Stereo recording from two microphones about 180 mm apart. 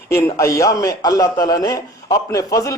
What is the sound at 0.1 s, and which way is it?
A man's voice, 15° left (ahead or behind).